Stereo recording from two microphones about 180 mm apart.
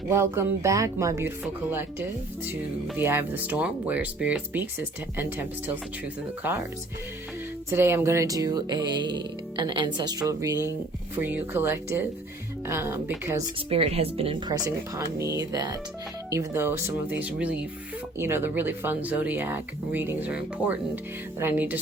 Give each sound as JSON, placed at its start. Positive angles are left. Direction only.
{"t": 0.1, "sound": "speech", "side_deg": -15}
{"t": 7.7, "sound": "music", "side_deg": -15}
{"t": 11.2, "sound": "speech", "side_deg": -10}
{"t": 13.7, "sound": "music", "side_deg": -30}
{"t": 16.3, "sound": "speech", "side_deg": -15}